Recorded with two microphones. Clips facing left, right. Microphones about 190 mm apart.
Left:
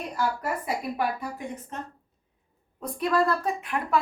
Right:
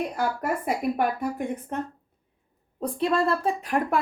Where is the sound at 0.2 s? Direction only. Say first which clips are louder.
Right 2 dB; 55° right (ahead or behind).